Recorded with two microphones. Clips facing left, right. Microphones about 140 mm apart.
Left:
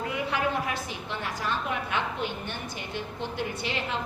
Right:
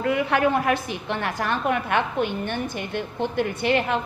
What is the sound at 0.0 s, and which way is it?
A woman's voice, 65° right (ahead or behind).